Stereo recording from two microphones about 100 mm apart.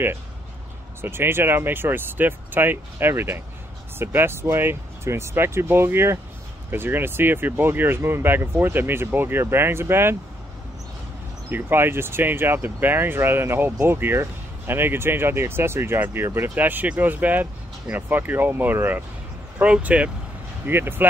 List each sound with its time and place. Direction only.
1.0 s speech: 25° right (ahead or behind)
11.4 s speech: 20° right (ahead or behind)